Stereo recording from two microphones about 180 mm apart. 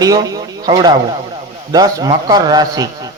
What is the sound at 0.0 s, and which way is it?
A man's voice, 20° right (ahead or behind).